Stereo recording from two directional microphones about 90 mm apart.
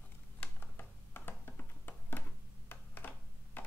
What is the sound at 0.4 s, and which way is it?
Computer keyboard, 25° left (ahead or behind).